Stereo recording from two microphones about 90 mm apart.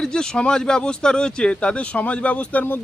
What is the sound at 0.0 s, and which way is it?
Speech, 5° left (ahead or behind).